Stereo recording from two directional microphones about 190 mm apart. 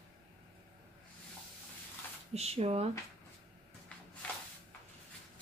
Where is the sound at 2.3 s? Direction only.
30° right (ahead or behind).